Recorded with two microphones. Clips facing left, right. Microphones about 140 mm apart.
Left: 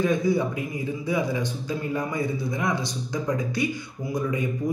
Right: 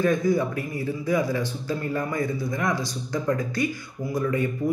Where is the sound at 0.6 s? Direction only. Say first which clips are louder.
Right 1 dB; 15° left (ahead or behind).